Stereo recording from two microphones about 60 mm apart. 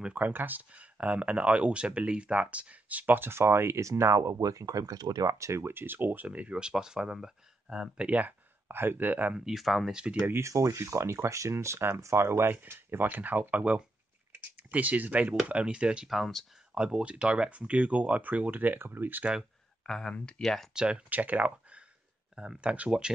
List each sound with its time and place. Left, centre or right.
0.0 s speech: right
5.5 s speech: right; by 8.1 s centre
8.1 s speech: right
9.4 s speech: centre
10.4 s speech: right
13.0 s speech: right
16.1 s speech: centre
16.7 s speech: centre; by 19.2 s right
19.9 s speech: centre
20.2 s speech: centre
20.4 s speech: centre
20.7 s speech: centre
21.1 s speech: right